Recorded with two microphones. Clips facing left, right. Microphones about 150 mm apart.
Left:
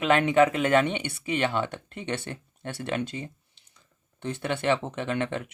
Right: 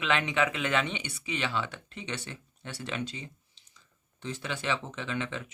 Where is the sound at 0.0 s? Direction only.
50° left (ahead or behind).